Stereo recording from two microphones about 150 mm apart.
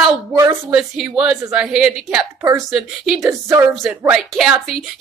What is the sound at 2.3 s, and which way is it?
Speech, 25° right (ahead or behind).